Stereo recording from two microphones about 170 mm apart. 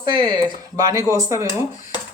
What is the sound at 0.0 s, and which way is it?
Speech, 25° right (ahead or behind).